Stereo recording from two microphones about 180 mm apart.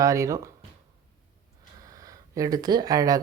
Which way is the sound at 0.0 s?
15° right (ahead or behind).